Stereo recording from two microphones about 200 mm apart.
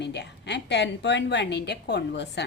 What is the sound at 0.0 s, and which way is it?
Speech, 60° left (ahead or behind).